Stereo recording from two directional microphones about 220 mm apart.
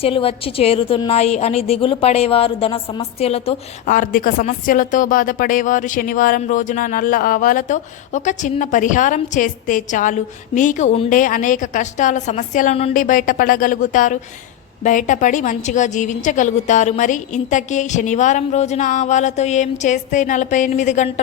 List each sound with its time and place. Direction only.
0.0 s a woman's voice: 25° left (ahead or behind)